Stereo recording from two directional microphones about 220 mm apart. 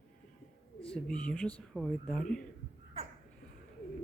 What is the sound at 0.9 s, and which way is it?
Speech, 5° left (ahead or behind).